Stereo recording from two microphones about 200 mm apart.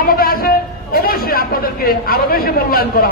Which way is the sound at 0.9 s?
50° left (ahead or behind).